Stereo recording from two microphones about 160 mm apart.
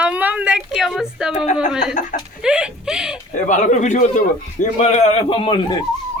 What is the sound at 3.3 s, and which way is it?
A man's voice, 50° left (ahead or behind).